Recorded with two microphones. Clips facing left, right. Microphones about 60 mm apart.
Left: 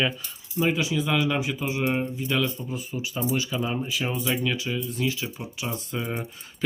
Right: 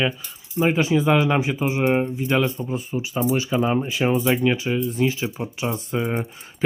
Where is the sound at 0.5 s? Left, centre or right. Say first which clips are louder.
Right 5 dB; right.